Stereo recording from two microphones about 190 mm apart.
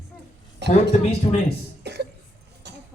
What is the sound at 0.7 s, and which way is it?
Speech, 30° left (ahead or behind).